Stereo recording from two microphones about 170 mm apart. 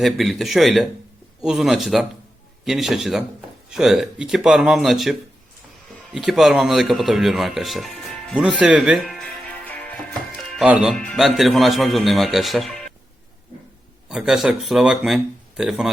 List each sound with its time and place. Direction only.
0.0 s speech: centre (ahead or behind)
6.1 s speech: centre (ahead or behind)
10.6 s speech: 5° right (ahead or behind)
14.1 s speech: 5° right (ahead or behind)